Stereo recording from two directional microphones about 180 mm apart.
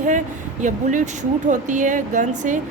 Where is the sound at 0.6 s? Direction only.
45° right (ahead or behind).